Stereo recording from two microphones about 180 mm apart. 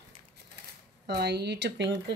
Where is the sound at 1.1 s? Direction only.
60° right (ahead or behind); by 2.0 s 80° right.